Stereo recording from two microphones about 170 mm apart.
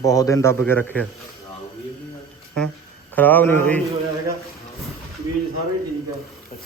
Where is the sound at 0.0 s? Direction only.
20° left (ahead or behind).